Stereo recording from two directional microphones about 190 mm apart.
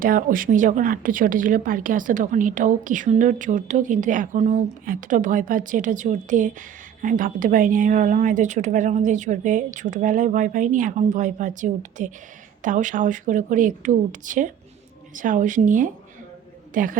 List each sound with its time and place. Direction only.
0.0 s a woman's voice: 45° right (ahead or behind)